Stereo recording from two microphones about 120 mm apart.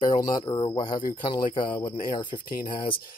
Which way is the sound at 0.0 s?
35° left (ahead or behind).